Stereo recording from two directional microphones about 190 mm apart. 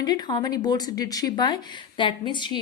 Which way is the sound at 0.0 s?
20° left (ahead or behind).